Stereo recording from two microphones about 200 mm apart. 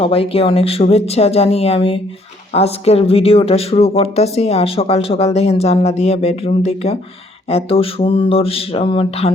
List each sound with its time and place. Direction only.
0.0 s speech: 30° left (ahead or behind)